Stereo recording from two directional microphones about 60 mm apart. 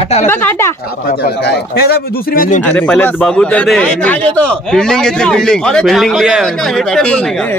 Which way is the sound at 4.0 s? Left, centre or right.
Left.